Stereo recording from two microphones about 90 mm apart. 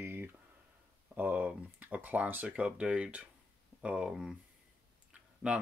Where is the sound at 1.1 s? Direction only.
20° right (ahead or behind).